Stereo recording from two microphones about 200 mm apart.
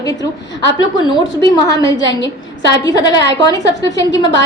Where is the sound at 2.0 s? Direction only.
65° left (ahead or behind).